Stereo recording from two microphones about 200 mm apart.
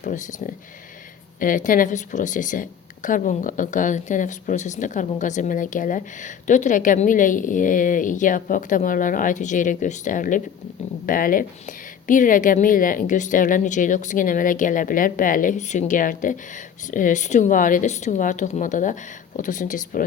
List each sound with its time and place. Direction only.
0.0 s speech: 40° left (ahead or behind)